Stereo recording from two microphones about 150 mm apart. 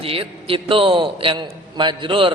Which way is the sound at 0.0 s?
40° right (ahead or behind).